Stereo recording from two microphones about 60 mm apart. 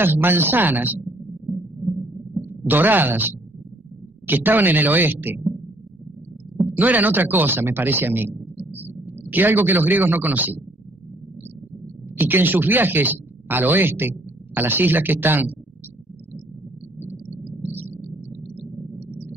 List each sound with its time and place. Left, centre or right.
0.0 s speech: right
1.5 s heart sounds: centre
2.4 s speech: right
6.6 s speech: right
12.2 s speech: right
17.6 s a sound: right